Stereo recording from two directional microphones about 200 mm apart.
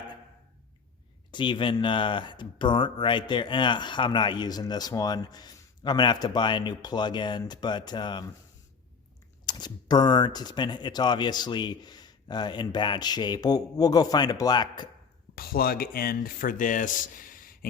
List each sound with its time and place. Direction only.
1.3 s speech: 25° left (ahead or behind)
9.5 s speech: 20° left (ahead or behind)
15.4 s speech: 50° left (ahead or behind)